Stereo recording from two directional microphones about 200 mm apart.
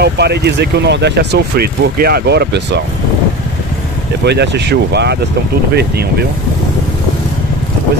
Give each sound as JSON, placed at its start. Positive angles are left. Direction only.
{"t": 0.0, "sound": "speech", "side_deg": -55}
{"t": 4.2, "sound": "speech", "side_deg": -55}